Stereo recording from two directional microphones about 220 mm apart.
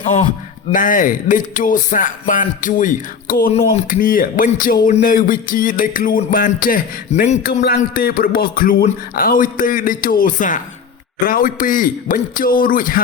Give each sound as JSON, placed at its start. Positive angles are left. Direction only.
{"t": 0.0, "sound": "a man's voice", "side_deg": 30}